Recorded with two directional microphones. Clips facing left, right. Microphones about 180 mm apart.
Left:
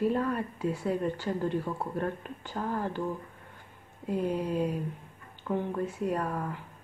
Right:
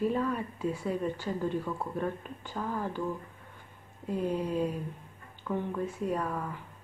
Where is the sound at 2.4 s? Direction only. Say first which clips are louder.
Left 2 dB; 15° left (ahead or behind).